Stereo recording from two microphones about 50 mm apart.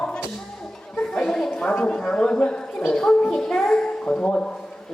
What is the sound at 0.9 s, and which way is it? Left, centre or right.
Music, centre.